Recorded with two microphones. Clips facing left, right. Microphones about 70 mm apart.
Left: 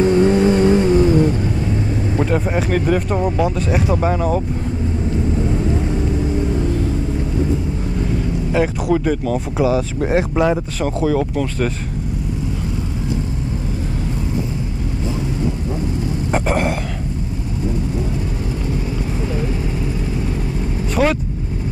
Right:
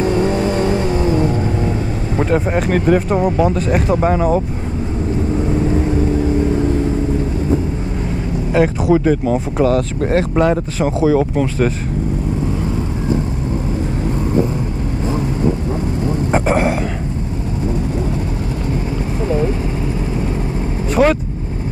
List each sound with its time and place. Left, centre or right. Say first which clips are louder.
0.0 s vehicle: left 3 dB; right
2.3 s speech: right 5 dB; centre
8.5 s speech: right 4 dB; centre
9.6 s speech: right 1 dB; centre
10.8 s speech: right 6 dB; centre
16.3 s vehicle: right 3 dB; centre
20.9 s speech: right 4 dB; centre